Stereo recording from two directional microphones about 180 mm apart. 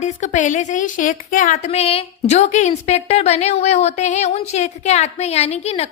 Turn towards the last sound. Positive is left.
turn(degrees=35)  # may be behind; listen again after turning